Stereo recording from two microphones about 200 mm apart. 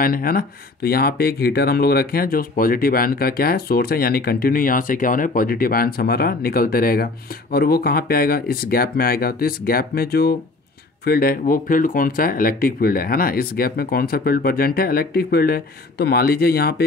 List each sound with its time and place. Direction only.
0.0 s speech: 45° left (ahead or behind)